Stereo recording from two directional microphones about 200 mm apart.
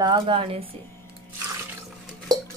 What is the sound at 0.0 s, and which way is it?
Speech, 25° right (ahead or behind).